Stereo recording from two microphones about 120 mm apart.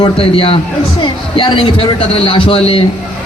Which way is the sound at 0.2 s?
50° left (ahead or behind).